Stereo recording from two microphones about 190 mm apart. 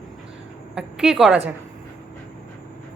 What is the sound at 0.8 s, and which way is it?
Speech, 5° right (ahead or behind).